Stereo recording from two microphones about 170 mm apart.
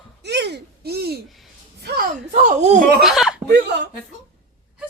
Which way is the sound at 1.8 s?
70° right (ahead or behind).